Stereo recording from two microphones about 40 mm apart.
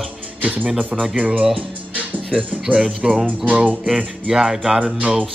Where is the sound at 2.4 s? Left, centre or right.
Right.